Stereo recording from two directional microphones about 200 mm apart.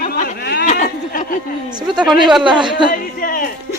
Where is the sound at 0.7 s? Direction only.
40° left (ahead or behind).